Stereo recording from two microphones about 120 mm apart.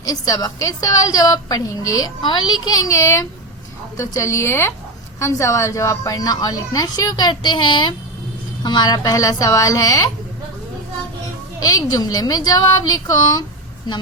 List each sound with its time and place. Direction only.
0.0 s a woman's voice: 30° left (ahead or behind)
11.6 s a woman's voice: 30° left (ahead or behind)